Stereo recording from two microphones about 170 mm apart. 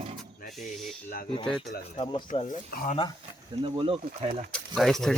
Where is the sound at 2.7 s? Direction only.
60° left (ahead or behind).